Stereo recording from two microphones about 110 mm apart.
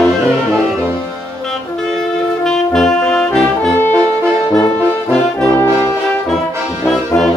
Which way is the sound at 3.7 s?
20° left (ahead or behind).